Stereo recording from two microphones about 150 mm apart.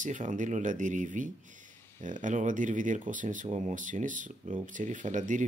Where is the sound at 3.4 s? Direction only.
50° right (ahead or behind).